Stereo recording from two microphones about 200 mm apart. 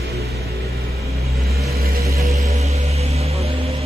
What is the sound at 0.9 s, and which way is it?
Vehicle, 15° right (ahead or behind).